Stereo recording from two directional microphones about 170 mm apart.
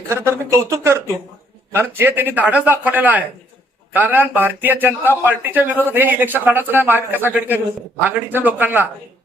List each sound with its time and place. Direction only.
0.1 s a man's voice: 15° right (ahead or behind)